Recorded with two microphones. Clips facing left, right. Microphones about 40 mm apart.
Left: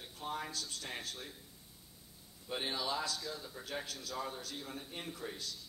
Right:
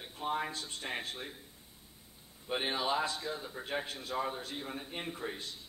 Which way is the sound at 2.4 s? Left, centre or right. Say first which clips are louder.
Right 5 dB; right.